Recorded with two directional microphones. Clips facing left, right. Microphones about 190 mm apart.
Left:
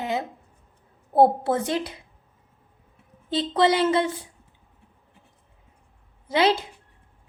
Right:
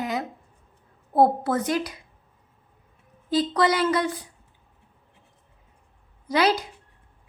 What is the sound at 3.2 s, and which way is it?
Speech, 25° left (ahead or behind).